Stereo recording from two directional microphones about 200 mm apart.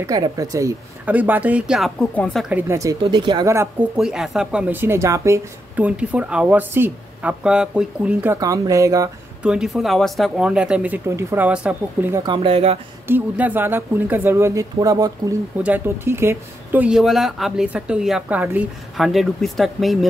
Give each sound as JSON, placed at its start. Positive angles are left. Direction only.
{"t": 0.0, "sound": "speech", "side_deg": -15}
{"t": 2.5, "sound": "speech", "side_deg": -15}
{"t": 4.0, "sound": "speech", "side_deg": 0}
{"t": 9.4, "sound": "speech", "side_deg": -5}
{"t": 12.2, "sound": "speech", "side_deg": -25}
{"t": 13.0, "sound": "speech", "side_deg": -10}